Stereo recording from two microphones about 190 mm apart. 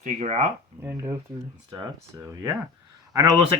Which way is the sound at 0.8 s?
15° right (ahead or behind).